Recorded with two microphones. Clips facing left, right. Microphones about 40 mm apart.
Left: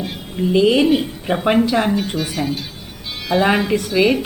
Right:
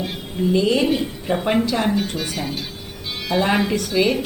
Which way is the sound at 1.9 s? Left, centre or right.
Centre.